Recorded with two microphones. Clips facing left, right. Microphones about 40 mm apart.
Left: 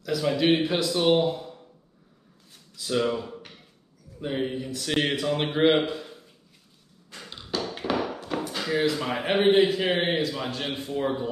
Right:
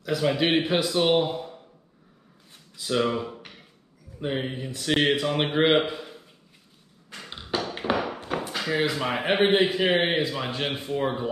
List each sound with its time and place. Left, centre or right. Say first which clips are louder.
0.0 s a man's voice: even; right
2.7 s a man's voice: right 1 dB; centre
7.1 s a sound: right 2 dB; right
7.7 s chop: even; right
9.5 s a man's voice: left 1 dB; centre